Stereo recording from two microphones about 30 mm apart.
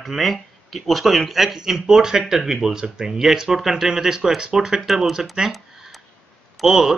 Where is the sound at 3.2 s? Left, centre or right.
Centre; by 5.5 s right.